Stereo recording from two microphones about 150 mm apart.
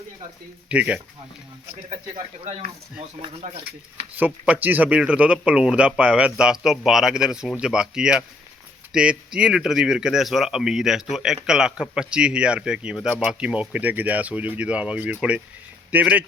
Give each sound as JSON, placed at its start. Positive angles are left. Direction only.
{"t": 0.7, "sound": "a man's voice", "side_deg": -10}
{"t": 2.4, "sound": "speech", "side_deg": -45}
{"t": 4.1, "sound": "a man's voice", "side_deg": -10}